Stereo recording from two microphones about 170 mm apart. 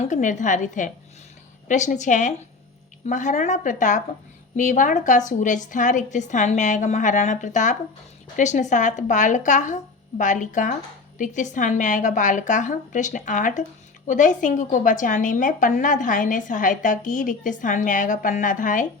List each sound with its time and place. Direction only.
0.0 s a woman's voice: 45° left (ahead or behind)